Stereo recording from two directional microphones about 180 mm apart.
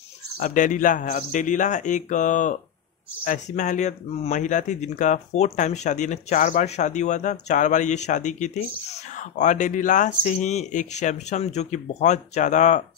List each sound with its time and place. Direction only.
0.4 s speech: 45° left (ahead or behind)